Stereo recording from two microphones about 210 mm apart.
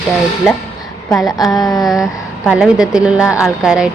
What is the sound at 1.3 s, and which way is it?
Speech, 20° left (ahead or behind).